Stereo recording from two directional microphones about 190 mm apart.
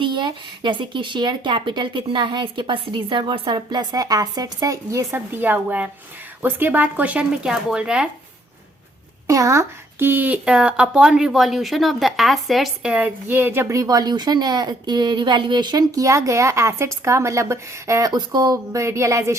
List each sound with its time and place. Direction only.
0.0 s speech: 25° right (ahead or behind); by 8.0 s 5° right (ahead or behind)
9.2 s speech: 15° right (ahead or behind)